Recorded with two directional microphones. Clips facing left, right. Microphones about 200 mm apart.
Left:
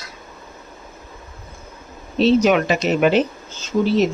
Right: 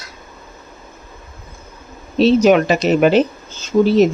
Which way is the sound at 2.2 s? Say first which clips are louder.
Right 3 dB; 40° right (ahead or behind).